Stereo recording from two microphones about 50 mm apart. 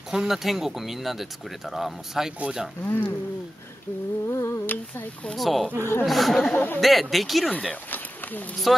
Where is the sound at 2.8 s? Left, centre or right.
Left.